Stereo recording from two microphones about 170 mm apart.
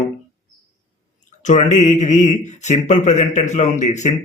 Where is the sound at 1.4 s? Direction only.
45° left (ahead or behind).